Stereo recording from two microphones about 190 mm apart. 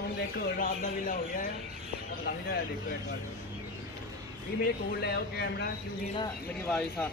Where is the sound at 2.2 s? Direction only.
55° left (ahead or behind).